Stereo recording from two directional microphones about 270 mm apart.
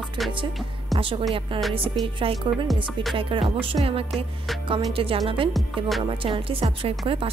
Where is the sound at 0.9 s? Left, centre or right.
Centre.